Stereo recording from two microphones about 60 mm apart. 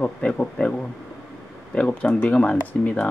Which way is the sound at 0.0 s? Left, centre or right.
Centre.